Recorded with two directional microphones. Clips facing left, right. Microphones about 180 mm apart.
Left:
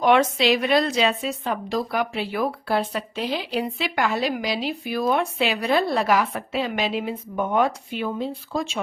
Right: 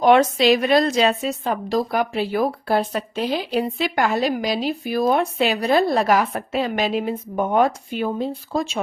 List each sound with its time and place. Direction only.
0.0 s speech: 40° right (ahead or behind)